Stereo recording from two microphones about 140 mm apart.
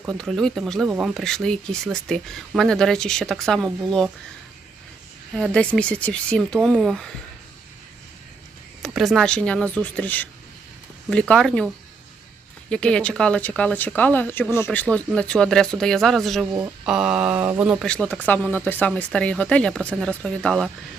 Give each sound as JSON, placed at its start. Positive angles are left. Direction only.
{"t": 0.2, "sound": "speech", "side_deg": 5}
{"t": 5.3, "sound": "speech", "side_deg": 5}
{"t": 8.8, "sound": "speech", "side_deg": 0}
{"t": 12.7, "sound": "speech", "side_deg": 5}
{"t": 16.8, "sound": "mantra", "side_deg": -5}
{"t": 17.8, "sound": "speech", "side_deg": 10}